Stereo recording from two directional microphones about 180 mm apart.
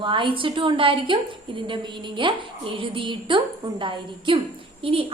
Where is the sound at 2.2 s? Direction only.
30° right (ahead or behind).